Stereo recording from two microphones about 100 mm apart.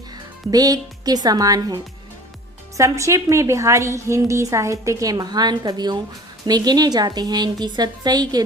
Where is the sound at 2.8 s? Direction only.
30° right (ahead or behind).